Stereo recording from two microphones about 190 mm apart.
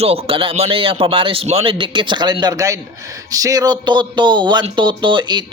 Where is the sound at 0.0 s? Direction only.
30° right (ahead or behind).